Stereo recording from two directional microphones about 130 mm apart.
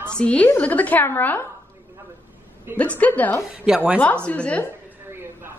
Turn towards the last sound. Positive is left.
turn(degrees=10)  # may be behind; listen again after turning